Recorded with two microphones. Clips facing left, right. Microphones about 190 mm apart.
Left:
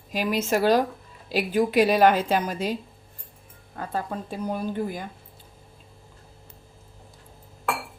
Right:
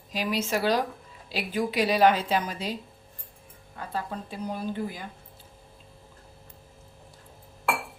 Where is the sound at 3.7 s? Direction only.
45° left (ahead or behind).